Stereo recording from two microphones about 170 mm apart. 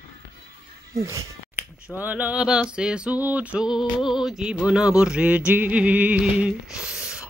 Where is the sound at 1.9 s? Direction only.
10° right (ahead or behind).